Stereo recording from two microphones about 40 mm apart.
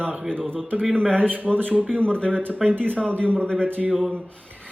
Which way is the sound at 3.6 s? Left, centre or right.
Right.